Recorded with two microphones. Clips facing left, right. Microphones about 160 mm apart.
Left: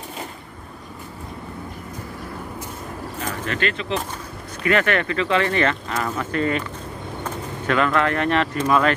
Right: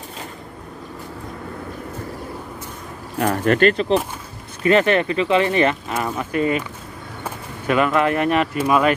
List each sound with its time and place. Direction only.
3.2 s speech: 55° right (ahead or behind)
4.6 s speech: 20° right (ahead or behind)
7.6 s speech: 15° right (ahead or behind)